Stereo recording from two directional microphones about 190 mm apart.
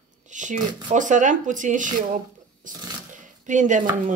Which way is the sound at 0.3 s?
40° right (ahead or behind).